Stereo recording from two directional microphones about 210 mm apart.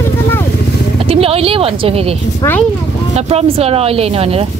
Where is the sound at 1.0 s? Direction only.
25° right (ahead or behind).